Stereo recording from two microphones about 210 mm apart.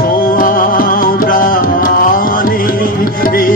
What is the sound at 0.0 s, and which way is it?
Music, 40° left (ahead or behind).